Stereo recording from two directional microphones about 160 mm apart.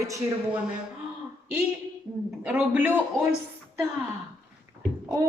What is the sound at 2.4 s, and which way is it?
Speech, 10° right (ahead or behind).